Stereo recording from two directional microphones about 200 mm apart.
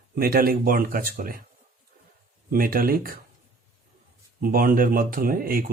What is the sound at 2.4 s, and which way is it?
Speech, 45° right (ahead or behind).